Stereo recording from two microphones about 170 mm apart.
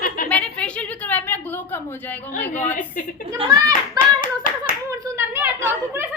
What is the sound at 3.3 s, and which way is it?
Speech, 20° right (ahead or behind).